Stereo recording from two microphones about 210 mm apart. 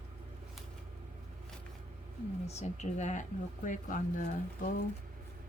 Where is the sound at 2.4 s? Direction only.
30° left (ahead or behind).